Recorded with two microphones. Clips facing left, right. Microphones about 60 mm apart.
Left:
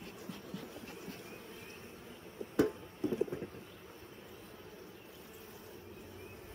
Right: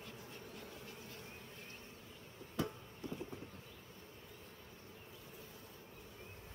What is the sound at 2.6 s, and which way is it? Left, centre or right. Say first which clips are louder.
Music: left 10 dB; left.